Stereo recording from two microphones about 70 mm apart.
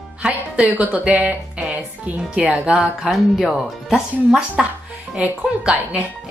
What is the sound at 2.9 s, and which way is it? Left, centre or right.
Speech, centre.